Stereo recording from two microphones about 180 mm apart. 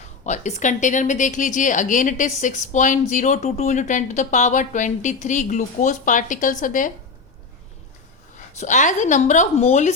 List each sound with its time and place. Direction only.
0.3 s a woman's voice: 40° left (ahead or behind)
8.5 s a woman's voice: 45° left (ahead or behind)